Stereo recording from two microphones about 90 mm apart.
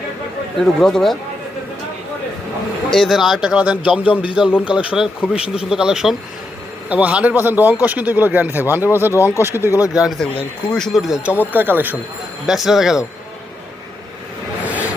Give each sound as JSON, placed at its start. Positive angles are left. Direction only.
{"t": 0.6, "sound": "speech", "side_deg": 5}
{"t": 2.9, "sound": "speech", "side_deg": 0}
{"t": 4.1, "sound": "a man's voice", "side_deg": 75}
{"t": 4.6, "sound": "speech", "side_deg": -15}
{"t": 9.9, "sound": "speech", "side_deg": -10}
{"t": 10.7, "sound": "speech", "side_deg": 5}
{"t": 11.3, "sound": "speech", "side_deg": -20}
{"t": 12.5, "sound": "speech", "side_deg": -5}
{"t": 14.6, "sound": "a sound", "side_deg": -15}